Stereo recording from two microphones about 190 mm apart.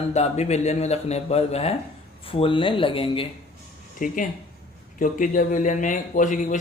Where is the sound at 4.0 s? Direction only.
45° left (ahead or behind).